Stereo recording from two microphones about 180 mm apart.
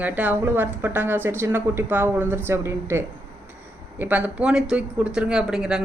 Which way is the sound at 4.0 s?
10° right (ahead or behind).